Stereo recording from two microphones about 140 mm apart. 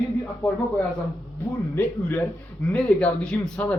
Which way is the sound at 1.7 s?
15° left (ahead or behind).